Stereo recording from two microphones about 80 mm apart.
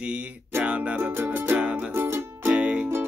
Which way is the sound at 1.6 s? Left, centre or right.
Centre.